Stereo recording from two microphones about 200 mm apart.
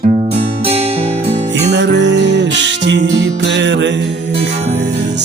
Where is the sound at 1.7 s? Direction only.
60° right (ahead or behind).